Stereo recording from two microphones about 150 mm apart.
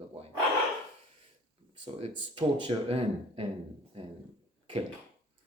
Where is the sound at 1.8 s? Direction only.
40° right (ahead or behind).